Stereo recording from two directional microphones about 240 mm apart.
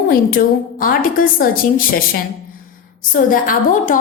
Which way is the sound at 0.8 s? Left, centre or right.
Left.